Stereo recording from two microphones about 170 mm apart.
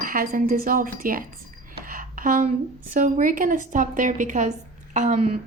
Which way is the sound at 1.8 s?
55° right (ahead or behind).